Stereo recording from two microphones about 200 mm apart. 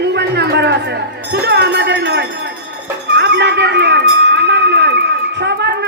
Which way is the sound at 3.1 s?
55° right (ahead or behind).